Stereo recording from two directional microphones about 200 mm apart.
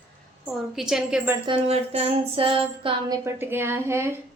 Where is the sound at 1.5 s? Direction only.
30° right (ahead or behind).